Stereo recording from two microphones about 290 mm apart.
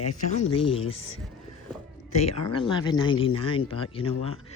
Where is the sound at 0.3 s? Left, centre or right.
Centre.